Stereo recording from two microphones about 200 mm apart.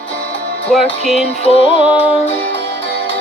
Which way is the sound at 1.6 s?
35° right (ahead or behind).